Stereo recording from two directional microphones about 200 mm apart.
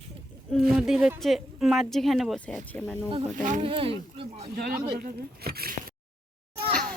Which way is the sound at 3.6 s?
25° right (ahead or behind).